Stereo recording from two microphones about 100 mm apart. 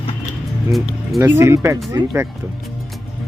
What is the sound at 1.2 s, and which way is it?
Speech, 25° right (ahead or behind).